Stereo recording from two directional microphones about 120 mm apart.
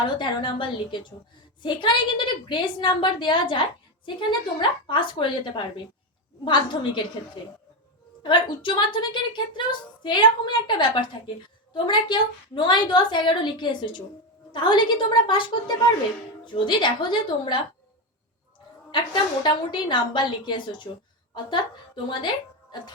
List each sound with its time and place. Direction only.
0.0 s a woman's voice: 40° left (ahead or behind)
8.2 s a woman's voice: 40° left (ahead or behind)
18.9 s a woman's voice: 40° left (ahead or behind)